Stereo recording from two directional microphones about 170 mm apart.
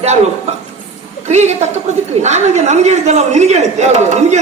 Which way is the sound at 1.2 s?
40° right (ahead or behind).